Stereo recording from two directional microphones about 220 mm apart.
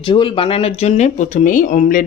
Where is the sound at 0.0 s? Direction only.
20° left (ahead or behind).